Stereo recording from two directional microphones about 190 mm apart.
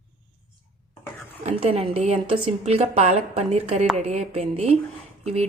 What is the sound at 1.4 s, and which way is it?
A woman's voice, 35° right (ahead or behind).